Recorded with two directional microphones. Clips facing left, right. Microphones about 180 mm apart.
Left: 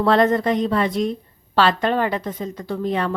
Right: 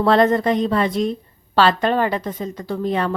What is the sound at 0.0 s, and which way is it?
A woman's voice, 30° right (ahead or behind).